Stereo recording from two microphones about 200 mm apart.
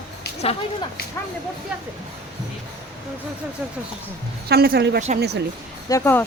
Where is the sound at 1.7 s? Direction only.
5° right (ahead or behind).